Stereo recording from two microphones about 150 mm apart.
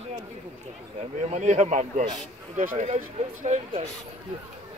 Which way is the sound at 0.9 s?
50° right (ahead or behind).